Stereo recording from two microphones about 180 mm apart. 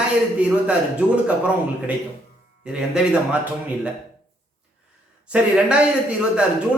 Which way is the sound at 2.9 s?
5° right (ahead or behind).